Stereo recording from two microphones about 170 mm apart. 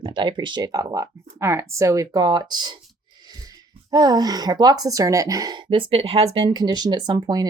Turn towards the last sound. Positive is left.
turn(degrees=-20)  # may be behind; listen again after turning